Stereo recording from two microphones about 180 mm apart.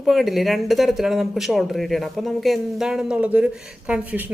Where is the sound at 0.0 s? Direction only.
Centre (ahead or behind).